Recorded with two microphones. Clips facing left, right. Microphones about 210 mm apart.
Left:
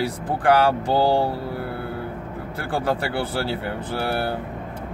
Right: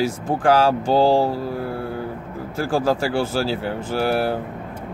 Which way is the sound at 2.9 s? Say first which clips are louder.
Right 4 dB; 30° right (ahead or behind).